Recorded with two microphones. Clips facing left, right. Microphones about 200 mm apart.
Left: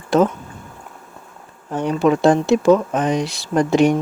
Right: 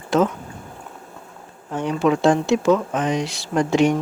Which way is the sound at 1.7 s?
40° left (ahead or behind).